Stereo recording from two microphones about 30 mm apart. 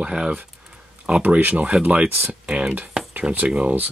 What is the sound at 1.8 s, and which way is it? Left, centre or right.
Speech, right.